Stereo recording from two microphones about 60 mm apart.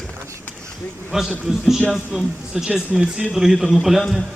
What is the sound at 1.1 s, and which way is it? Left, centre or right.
A man's voice, centre.